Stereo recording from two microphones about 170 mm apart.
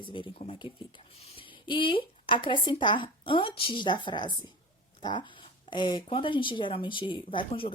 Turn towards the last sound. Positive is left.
turn(degrees=30)  # may be behind; listen again after turning